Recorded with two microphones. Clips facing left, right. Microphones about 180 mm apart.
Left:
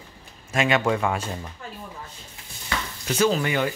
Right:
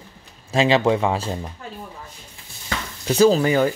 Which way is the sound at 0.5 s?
30° right (ahead or behind).